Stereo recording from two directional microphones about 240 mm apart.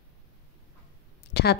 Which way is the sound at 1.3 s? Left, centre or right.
Left.